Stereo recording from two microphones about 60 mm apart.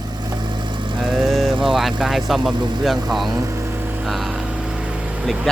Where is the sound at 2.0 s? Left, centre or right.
Centre.